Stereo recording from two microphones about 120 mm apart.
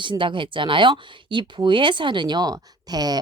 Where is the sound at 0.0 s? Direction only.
40° right (ahead or behind).